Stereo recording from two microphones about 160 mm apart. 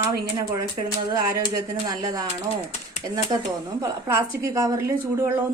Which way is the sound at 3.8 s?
20° right (ahead or behind).